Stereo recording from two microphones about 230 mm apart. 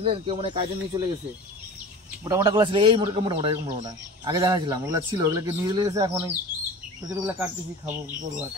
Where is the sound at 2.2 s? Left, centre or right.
Centre.